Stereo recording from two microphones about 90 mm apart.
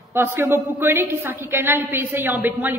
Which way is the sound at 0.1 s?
25° right (ahead or behind).